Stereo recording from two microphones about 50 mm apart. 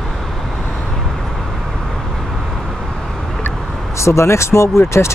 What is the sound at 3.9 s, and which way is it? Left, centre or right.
Speech, left.